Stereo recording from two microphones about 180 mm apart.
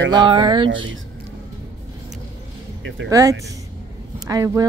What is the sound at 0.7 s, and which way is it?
Speech, 90° right.